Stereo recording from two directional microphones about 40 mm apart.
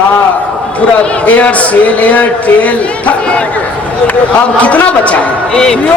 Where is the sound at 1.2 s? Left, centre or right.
Left.